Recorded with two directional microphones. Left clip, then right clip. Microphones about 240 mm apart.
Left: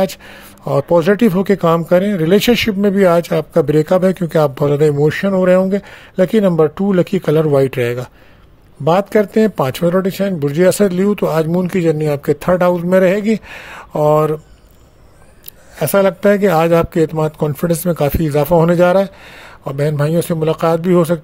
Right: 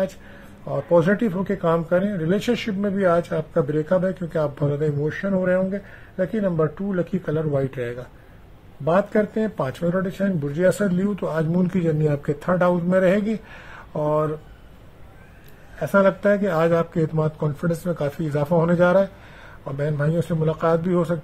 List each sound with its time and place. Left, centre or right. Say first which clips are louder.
0.7 s speech: left 7 dB; left
15.8 s speech: left 6 dB; left